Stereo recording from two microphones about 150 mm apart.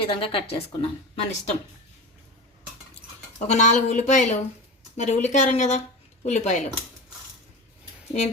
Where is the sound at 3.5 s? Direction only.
50° left (ahead or behind).